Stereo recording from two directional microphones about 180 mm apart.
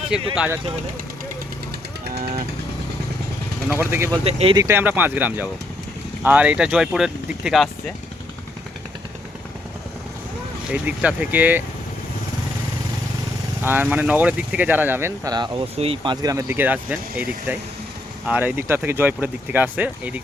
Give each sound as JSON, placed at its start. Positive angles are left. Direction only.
{"t": 0.3, "sound": "speech", "side_deg": -10}
{"t": 2.0, "sound": "vehicle", "side_deg": -60}
{"t": 3.7, "sound": "speech", "side_deg": -10}
{"t": 4.2, "sound": "speech", "side_deg": -35}
{"t": 4.5, "sound": "speech", "side_deg": -15}
{"t": 10.7, "sound": "speech", "side_deg": -5}
{"t": 13.6, "sound": "speech", "side_deg": -10}
{"t": 15.7, "sound": "speech", "side_deg": -35}
{"t": 16.2, "sound": "speech", "side_deg": -20}